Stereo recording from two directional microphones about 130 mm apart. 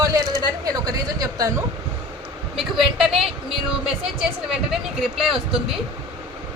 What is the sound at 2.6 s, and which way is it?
Speech, centre (ahead or behind).